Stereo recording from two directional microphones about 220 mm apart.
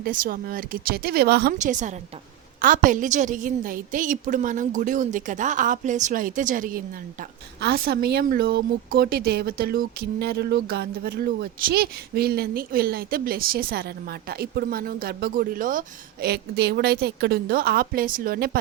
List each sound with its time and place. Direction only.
0.0 s a woman's voice: 40° right (ahead or behind)